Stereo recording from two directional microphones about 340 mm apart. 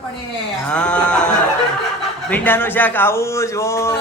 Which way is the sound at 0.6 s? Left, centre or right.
Centre.